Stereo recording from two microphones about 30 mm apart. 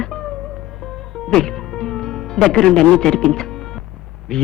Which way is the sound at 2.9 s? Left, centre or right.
Centre.